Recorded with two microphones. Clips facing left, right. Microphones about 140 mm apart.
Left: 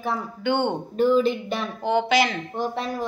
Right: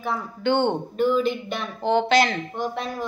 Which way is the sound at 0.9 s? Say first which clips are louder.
Left 4 dB; 35° left (ahead or behind).